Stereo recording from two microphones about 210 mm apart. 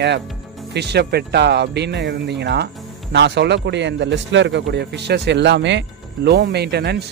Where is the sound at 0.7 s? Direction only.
50° right (ahead or behind).